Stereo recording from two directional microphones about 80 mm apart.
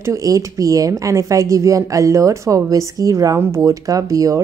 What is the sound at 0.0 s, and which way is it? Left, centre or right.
A woman's voice, right.